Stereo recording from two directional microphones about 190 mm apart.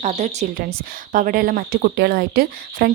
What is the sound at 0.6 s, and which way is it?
Speech, 50° right (ahead or behind).